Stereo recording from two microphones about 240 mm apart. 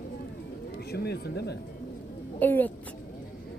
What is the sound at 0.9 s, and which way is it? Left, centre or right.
Speech, left.